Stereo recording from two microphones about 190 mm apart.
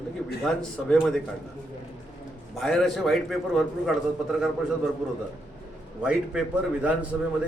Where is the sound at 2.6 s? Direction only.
Centre (ahead or behind).